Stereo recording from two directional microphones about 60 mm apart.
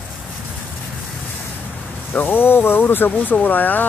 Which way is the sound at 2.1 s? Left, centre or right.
Left.